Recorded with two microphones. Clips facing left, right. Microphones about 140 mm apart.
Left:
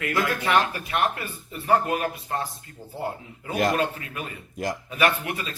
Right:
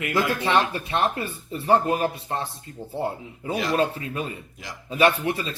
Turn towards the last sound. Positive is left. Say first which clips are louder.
# right 3 dB
turn(degrees=-30)  # may be behind; listen again after turning